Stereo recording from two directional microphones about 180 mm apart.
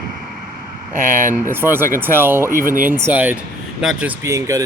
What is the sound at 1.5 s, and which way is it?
Speech, 10° right (ahead or behind).